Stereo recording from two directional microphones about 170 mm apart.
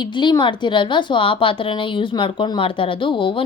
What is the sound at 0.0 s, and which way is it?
A woman's voice, 25° left (ahead or behind).